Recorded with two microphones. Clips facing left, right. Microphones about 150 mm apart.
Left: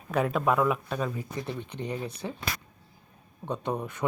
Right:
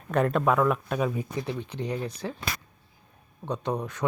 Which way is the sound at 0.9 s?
15° right (ahead or behind).